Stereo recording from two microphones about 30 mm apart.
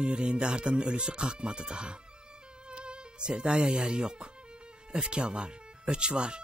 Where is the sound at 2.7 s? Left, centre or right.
Right.